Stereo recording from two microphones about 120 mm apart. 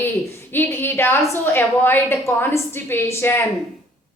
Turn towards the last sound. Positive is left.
turn(degrees=20)  # may be behind; listen again after turning